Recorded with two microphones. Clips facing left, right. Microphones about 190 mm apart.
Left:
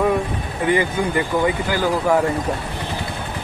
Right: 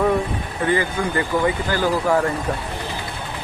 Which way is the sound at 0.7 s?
15° left (ahead or behind).